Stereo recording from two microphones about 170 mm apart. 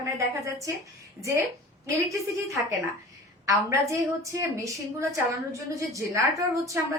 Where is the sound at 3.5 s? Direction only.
20° right (ahead or behind).